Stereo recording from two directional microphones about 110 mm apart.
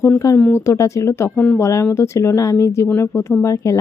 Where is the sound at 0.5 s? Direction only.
25° left (ahead or behind).